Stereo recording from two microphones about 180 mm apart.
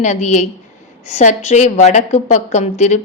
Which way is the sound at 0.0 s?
40° left (ahead or behind).